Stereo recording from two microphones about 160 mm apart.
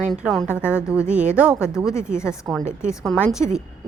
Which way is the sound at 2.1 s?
15° left (ahead or behind).